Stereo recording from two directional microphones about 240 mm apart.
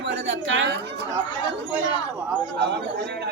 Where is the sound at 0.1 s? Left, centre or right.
Right.